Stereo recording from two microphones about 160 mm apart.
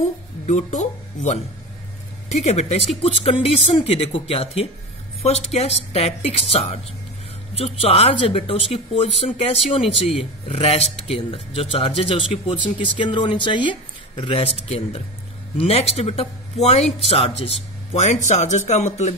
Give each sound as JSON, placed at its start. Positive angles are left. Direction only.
{"t": 0.5, "sound": "speech", "side_deg": 50}